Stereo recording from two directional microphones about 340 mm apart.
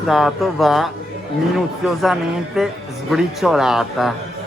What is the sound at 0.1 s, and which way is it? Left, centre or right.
Speech, centre.